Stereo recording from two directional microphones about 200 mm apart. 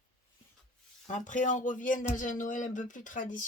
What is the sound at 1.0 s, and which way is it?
Speech, 40° left (ahead or behind).